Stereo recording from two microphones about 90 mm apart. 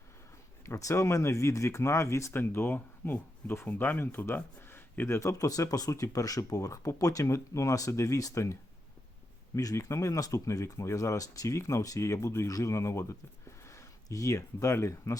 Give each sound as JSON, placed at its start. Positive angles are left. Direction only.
{"t": 0.6, "sound": "speech", "side_deg": 35}
{"t": 9.6, "sound": "speech", "side_deg": 35}